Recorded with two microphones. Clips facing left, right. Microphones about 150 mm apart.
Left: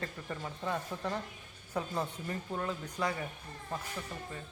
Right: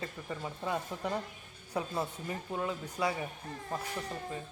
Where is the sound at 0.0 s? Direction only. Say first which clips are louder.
Right 1 dB; 10° right (ahead or behind).